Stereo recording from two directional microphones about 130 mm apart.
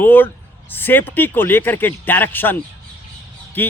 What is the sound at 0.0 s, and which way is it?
A man's voice, 15° left (ahead or behind).